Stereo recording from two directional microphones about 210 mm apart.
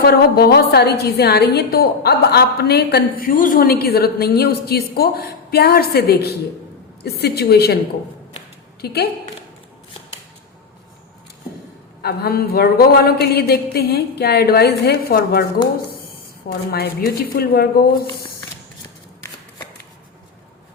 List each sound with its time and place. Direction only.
0.0 s a woman's voice: 50° left (ahead or behind)
8.8 s a woman's voice: 50° left (ahead or behind)
12.0 s a woman's voice: 45° left (ahead or behind)
16.7 s a woman's voice: 45° left (ahead or behind)